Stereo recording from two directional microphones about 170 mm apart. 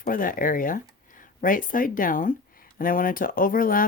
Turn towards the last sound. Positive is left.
turn(degrees=55)  # may be behind; listen again after turning